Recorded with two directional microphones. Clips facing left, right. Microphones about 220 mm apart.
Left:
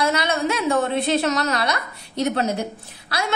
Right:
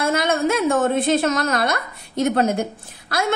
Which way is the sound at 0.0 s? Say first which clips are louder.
Right 2 dB; 50° right (ahead or behind).